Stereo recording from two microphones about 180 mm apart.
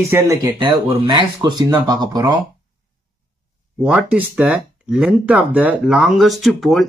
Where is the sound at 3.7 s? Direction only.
10° right (ahead or behind).